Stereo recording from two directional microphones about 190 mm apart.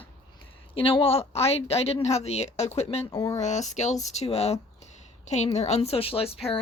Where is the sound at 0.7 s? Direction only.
30° left (ahead or behind).